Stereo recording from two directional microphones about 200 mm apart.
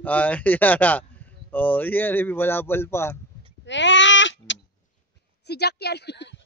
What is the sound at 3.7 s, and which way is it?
Bleat, 65° left (ahead or behind).